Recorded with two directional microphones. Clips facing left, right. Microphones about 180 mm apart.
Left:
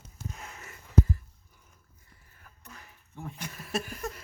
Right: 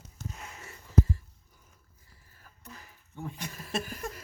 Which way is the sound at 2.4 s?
35° right (ahead or behind).